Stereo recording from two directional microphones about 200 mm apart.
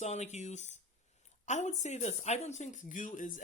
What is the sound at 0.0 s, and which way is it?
Speech, 35° left (ahead or behind).